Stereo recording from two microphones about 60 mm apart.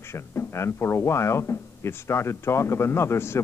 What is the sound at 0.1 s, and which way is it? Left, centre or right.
Speech, left.